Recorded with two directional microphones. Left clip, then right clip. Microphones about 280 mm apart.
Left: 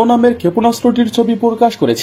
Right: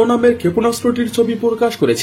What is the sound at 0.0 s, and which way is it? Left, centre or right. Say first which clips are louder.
Speech: left 2 dB; centre.